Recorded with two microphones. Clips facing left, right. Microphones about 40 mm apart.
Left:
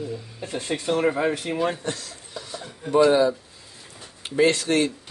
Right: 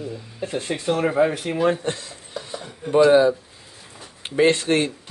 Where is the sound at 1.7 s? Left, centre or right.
Right.